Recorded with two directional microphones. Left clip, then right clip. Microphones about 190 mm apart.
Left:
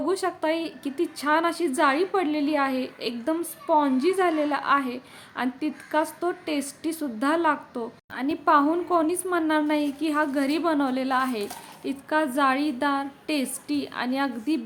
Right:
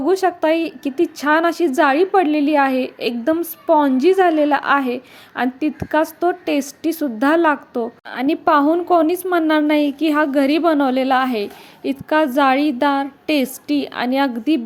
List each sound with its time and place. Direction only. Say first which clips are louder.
0.0 s a woman's voice: right 9 dB; 30° right (ahead or behind)